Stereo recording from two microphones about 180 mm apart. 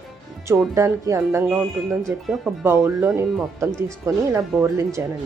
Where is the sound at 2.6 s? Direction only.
15° right (ahead or behind).